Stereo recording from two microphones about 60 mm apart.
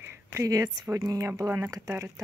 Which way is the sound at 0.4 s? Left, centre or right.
Right.